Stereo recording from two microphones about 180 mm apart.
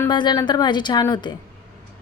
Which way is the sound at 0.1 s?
25° left (ahead or behind).